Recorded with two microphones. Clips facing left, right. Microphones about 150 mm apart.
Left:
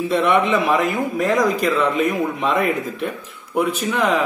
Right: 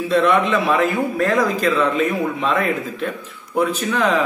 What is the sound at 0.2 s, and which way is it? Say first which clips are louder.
Speech: left 1 dB; 20° left (ahead or behind).